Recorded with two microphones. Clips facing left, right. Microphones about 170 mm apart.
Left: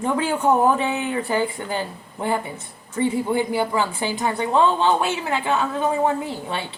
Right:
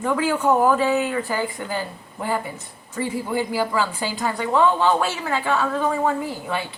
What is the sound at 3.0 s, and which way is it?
A woman's voice, 25° left (ahead or behind).